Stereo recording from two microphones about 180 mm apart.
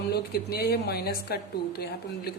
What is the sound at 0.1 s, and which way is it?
Speech, 60° left (ahead or behind).